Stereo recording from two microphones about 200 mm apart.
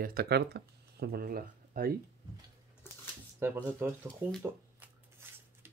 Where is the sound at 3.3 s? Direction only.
10° right (ahead or behind).